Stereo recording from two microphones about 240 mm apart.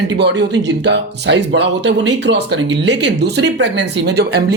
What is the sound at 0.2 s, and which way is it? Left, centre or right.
Speech, right.